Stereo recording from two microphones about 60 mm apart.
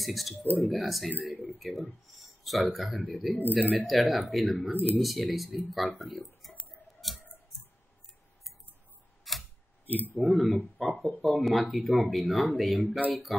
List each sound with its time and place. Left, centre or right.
0.0 s speech: centre
4.7 s speech: left
5.0 s speech: centre
9.2 s camera: centre
10.1 s speech: centre